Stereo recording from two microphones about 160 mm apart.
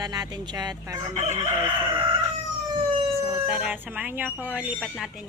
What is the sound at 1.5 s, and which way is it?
Speech, 15° right (ahead or behind).